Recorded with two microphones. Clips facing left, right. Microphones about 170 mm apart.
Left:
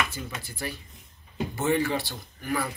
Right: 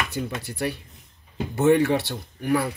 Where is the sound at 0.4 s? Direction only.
65° right (ahead or behind).